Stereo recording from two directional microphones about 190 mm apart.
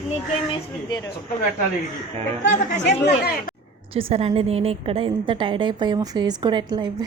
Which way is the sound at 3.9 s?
30° right (ahead or behind).